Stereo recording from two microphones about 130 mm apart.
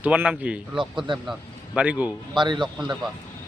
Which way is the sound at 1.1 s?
40° right (ahead or behind).